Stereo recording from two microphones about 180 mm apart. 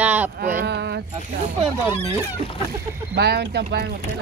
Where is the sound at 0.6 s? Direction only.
65° right (ahead or behind).